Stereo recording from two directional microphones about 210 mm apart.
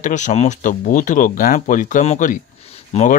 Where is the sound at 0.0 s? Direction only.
35° left (ahead or behind).